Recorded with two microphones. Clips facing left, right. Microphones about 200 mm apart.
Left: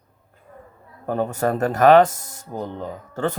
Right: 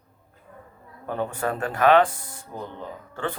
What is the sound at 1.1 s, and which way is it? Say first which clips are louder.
Speech: left 5 dB; 40° left (ahead or behind).